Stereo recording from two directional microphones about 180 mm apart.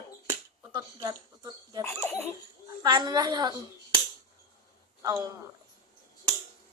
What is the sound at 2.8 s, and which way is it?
Speech, 25° right (ahead or behind).